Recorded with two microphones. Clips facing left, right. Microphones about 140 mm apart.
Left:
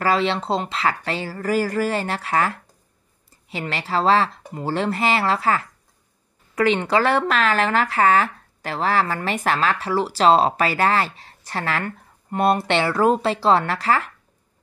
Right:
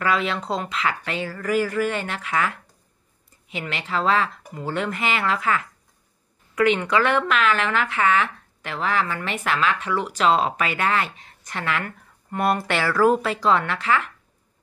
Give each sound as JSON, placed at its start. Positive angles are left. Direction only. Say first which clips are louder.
{"t": 0.0, "sound": "speech", "louder": "left 3 dB", "side_deg": 30}